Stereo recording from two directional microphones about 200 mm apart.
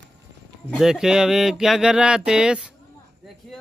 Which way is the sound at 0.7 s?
Centre (ahead or behind).